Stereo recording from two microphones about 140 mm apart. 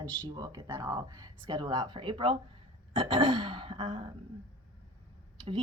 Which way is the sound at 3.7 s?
50° right (ahead or behind).